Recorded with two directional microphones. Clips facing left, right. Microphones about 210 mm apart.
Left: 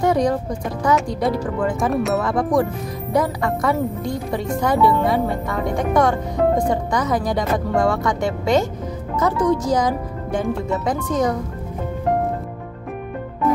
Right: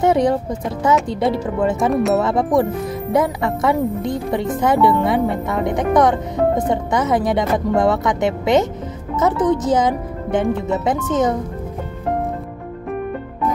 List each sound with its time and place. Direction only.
0.0 s speech: 25° right (ahead or behind)
1.8 s speech: centre (ahead or behind)
2.1 s speech: 25° right (ahead or behind)